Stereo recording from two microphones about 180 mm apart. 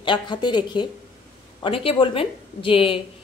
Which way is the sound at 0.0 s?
25° left (ahead or behind).